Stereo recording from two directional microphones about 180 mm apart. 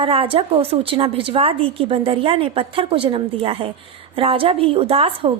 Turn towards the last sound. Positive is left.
turn(degrees=-30)  # may be behind; listen again after turning